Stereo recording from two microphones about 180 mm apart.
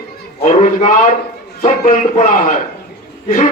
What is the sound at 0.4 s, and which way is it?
A man's voice, 45° left (ahead or behind).